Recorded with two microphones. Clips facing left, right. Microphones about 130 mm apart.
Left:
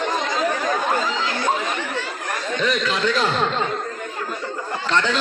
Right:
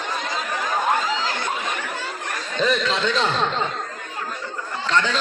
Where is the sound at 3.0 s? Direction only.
5° left (ahead or behind).